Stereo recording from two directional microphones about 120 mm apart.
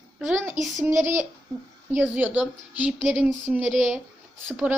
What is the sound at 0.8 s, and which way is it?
A woman's voice, 20° right (ahead or behind).